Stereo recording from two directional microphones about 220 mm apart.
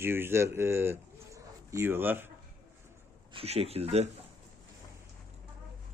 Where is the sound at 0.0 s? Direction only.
10° right (ahead or behind).